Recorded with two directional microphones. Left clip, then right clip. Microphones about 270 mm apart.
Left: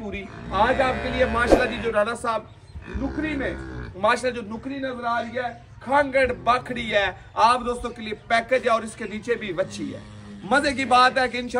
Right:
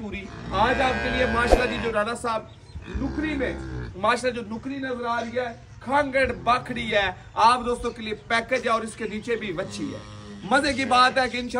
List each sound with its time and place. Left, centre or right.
0.1 s a man's voice: centre